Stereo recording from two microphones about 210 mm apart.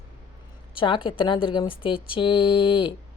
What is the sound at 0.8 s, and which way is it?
Speech, 25° left (ahead or behind).